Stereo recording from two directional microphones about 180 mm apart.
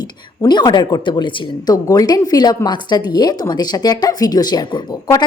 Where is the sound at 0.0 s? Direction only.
25° left (ahead or behind).